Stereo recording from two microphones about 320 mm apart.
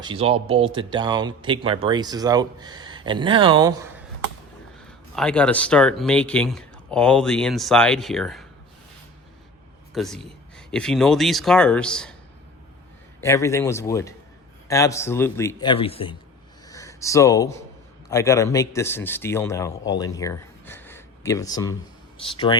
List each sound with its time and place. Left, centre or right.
0.0 s speech: centre
5.1 s speech: centre
9.9 s speech: centre
13.2 s speech: centre
16.6 s a sound: centre
18.1 s a man's voice: centre